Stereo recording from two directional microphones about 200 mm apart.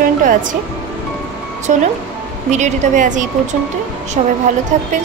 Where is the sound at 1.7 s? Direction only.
40° right (ahead or behind).